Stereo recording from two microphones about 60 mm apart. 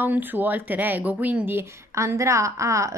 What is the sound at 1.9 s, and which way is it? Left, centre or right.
A woman's voice, right.